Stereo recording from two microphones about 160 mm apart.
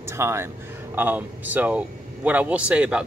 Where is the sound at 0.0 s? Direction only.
15° right (ahead or behind).